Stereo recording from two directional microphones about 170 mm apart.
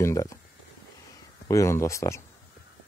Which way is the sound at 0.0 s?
20° left (ahead or behind).